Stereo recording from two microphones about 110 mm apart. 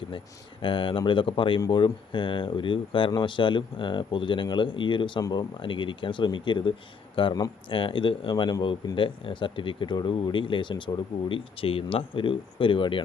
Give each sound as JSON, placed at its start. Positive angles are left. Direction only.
{"t": 0.6, "sound": "speech", "side_deg": 50}